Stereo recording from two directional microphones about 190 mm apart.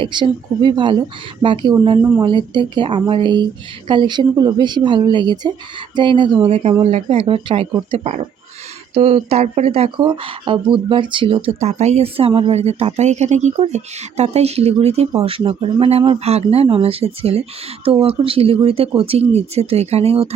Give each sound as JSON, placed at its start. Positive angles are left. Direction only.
{"t": 0.0, "sound": "speech", "side_deg": -25}